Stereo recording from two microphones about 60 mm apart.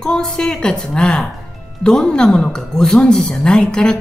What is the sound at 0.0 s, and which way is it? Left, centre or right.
A woman's voice, centre.